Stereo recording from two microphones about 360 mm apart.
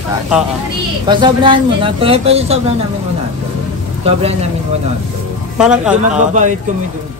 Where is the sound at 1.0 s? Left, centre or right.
Centre.